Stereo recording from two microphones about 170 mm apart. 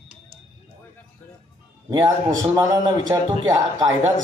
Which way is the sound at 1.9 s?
20° right (ahead or behind).